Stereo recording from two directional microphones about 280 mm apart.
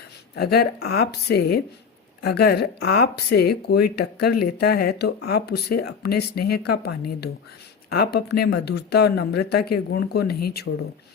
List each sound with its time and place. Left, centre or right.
0.3 s speech: left